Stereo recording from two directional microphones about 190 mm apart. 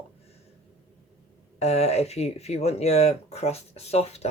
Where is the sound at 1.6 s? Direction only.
35° left (ahead or behind).